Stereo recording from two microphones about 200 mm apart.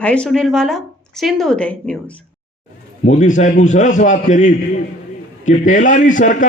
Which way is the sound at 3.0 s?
35° left (ahead or behind).